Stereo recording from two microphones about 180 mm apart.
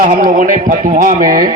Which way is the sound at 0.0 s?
50° right (ahead or behind).